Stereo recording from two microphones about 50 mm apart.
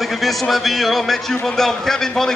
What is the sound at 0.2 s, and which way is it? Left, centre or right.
A man's voice, centre.